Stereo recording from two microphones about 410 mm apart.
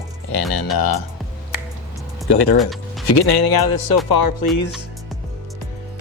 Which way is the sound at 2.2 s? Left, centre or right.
Left.